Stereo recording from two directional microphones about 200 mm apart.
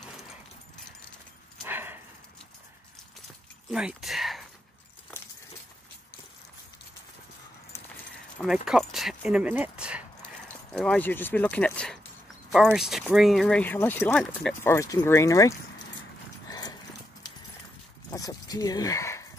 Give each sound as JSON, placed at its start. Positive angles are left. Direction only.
{"t": 1.6, "sound": "dog", "side_deg": -10}
{"t": 3.7, "sound": "speech", "side_deg": -5}
{"t": 8.6, "sound": "speech", "side_deg": 0}
{"t": 10.7, "sound": "speech", "side_deg": 5}
{"t": 14.7, "sound": "speech", "side_deg": 15}
{"t": 16.4, "sound": "clip-clop", "side_deg": 20}
{"t": 18.1, "sound": "a sound", "side_deg": 20}